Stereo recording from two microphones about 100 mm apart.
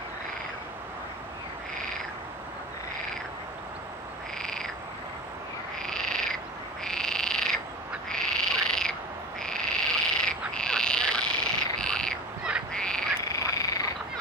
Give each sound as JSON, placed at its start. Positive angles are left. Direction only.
{"t": 4.4, "sound": "frog", "side_deg": 5}
{"t": 5.8, "sound": "frog", "side_deg": 5}
{"t": 13.2, "sound": "frog", "side_deg": 35}